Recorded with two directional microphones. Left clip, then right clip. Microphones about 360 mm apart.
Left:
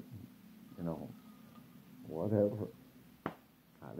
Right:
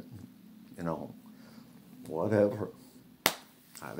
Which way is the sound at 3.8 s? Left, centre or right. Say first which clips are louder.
Right 8 dB; right.